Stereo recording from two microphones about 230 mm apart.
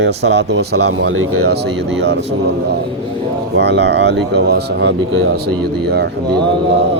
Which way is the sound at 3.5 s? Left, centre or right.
Right.